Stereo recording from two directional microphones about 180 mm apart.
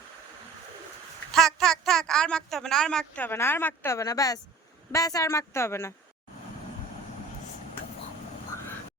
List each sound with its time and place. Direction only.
1.3 s a woman's voice: centre (ahead or behind)